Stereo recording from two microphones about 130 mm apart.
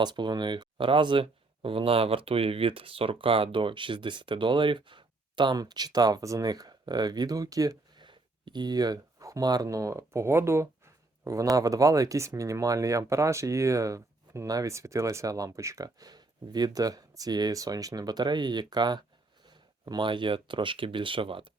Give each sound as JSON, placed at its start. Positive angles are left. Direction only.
{"t": 0.0, "sound": "speech", "side_deg": -35}